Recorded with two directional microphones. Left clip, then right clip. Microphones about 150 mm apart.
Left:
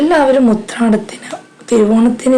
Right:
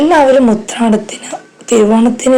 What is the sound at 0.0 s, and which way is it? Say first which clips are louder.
A woman's voice: right 3 dB; centre (ahead or behind).